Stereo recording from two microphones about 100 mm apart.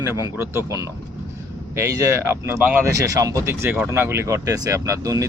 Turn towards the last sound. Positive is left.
turn(degrees=-35)  # may be behind; listen again after turning